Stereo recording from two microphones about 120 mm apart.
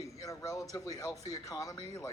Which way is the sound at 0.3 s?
25° left (ahead or behind).